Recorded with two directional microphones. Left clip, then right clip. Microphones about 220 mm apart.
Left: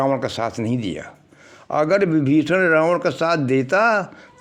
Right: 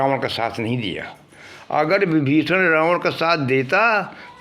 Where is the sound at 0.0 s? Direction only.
55° left (ahead or behind).